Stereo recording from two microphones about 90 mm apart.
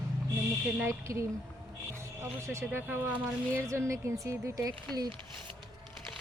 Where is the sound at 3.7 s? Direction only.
35° right (ahead or behind).